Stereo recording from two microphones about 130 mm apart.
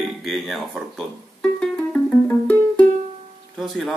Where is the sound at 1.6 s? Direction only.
10° left (ahead or behind).